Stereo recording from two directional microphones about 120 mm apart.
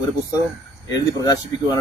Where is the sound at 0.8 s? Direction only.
30° left (ahead or behind).